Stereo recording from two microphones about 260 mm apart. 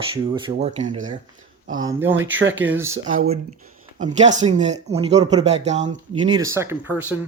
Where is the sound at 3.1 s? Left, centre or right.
Right; by 7.2 s centre.